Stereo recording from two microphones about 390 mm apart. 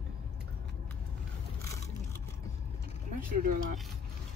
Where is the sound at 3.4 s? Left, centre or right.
Right.